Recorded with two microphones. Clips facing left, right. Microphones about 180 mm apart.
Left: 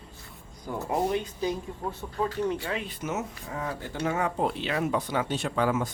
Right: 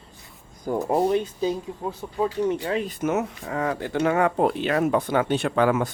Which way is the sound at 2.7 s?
40° right (ahead or behind).